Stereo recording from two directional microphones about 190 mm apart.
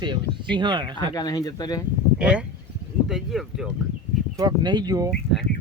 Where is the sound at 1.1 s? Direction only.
20° left (ahead or behind).